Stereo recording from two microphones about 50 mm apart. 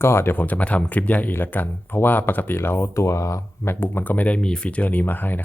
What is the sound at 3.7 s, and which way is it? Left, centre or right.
Speech, left.